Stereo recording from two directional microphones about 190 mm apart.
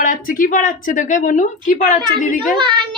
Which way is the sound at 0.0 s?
45° left (ahead or behind).